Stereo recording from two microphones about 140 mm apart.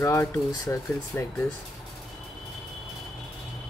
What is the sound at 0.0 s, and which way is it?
Speech, 20° left (ahead or behind).